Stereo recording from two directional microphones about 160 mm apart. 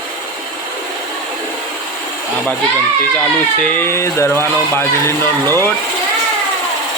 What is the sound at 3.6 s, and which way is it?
Speech, 15° left (ahead or behind).